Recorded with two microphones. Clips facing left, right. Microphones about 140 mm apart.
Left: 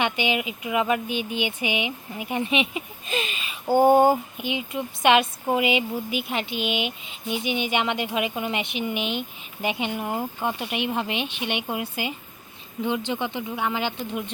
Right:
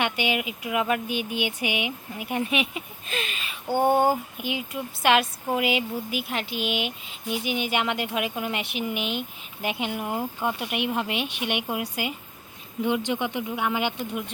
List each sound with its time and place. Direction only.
0.3 s speech: centre (ahead or behind)
1.4 s speech: 55° right (ahead or behind)
2.1 s speech: centre (ahead or behind)
6.5 s speech: 45° right (ahead or behind)
7.3 s speech: 5° right (ahead or behind)